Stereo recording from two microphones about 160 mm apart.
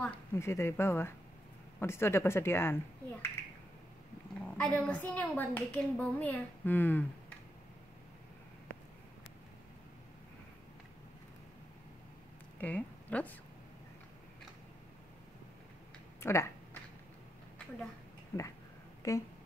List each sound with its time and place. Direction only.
0.0 s a woman's voice: 10° left (ahead or behind)
4.6 s a woman's voice: 5° left (ahead or behind)
12.5 s speech: 10° left (ahead or behind)
16.2 s speech: 15° left (ahead or behind)
18.3 s a woman's voice: 15° left (ahead or behind)